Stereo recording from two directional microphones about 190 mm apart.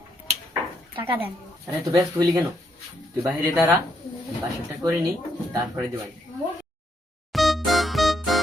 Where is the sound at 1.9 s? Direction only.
15° right (ahead or behind).